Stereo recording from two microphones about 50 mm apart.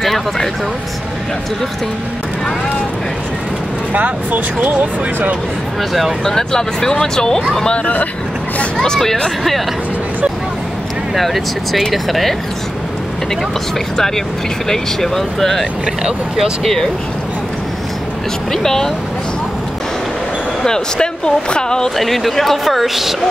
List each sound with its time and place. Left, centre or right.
0.0 s speech: centre
3.9 s speech: right
5.8 s speech: centre
7.6 s speech: left
8.7 s speech: centre
11.1 s speech: centre
13.9 s speech: centre
16.0 s speech: centre
16.6 s speech: centre
18.5 s speech: centre
20.6 s speech: centre
21.9 s speech: centre